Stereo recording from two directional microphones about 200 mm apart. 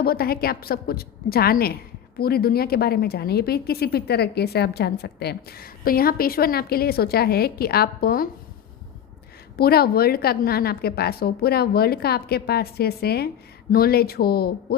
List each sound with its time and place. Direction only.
0.0 s a woman's voice: 50° left (ahead or behind)
9.6 s a woman's voice: 50° left (ahead or behind)